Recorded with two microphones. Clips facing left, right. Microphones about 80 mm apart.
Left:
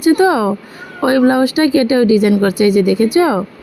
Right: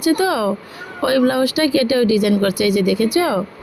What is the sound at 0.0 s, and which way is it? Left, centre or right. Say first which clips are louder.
Speech: left 5 dB; left.